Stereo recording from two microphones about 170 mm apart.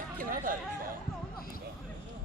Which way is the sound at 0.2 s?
55° right (ahead or behind).